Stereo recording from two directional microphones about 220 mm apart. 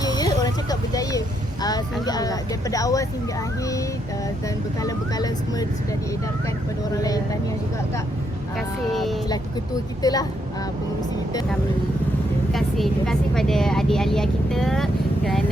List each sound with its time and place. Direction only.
0.0 s a sound: 20° left (ahead or behind)
1.6 s speech: 15° left (ahead or behind)
4.8 s speech: 15° left (ahead or behind)
6.9 s speech: 15° left (ahead or behind)
8.5 s speech: centre (ahead or behind)
10.0 s speech: 15° left (ahead or behind)
12.5 s speech: centre (ahead or behind)